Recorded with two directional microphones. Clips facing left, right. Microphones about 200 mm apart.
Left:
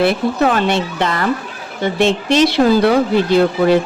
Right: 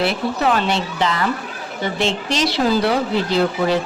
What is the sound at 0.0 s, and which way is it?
A woman's voice, 50° left (ahead or behind).